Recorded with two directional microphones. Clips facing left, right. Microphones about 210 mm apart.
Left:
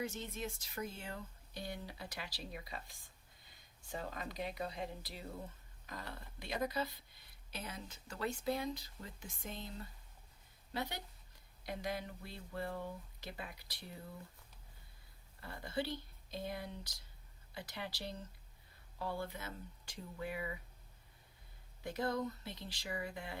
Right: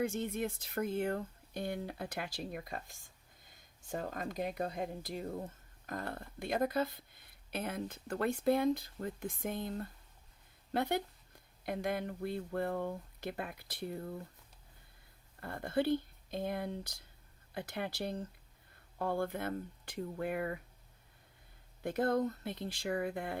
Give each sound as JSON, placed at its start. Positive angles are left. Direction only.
{"t": 0.0, "sound": "speech", "side_deg": -55}
{"t": 15.4, "sound": "speech", "side_deg": -55}
{"t": 21.8, "sound": "speech", "side_deg": -55}